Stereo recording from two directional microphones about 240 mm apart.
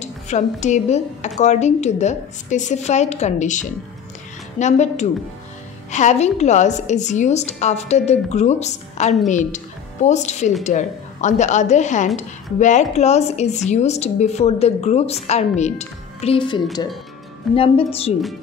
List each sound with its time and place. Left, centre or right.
0.0 s a woman's voice: left